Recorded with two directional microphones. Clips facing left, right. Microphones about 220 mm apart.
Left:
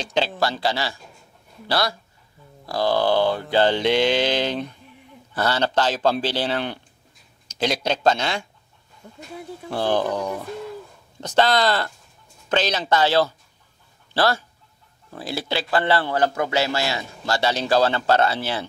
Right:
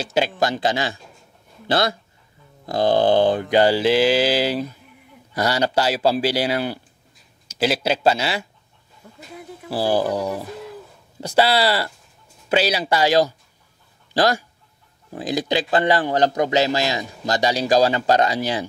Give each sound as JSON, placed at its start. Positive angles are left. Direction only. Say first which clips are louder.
{"t": 0.0, "sound": "a man's voice", "louder": "right 2 dB", "side_deg": -10}
{"t": 9.0, "sound": "a sound", "louder": "left 2 dB", "side_deg": 25}
{"t": 9.7, "sound": "a man's voice", "louder": "right 2 dB", "side_deg": -5}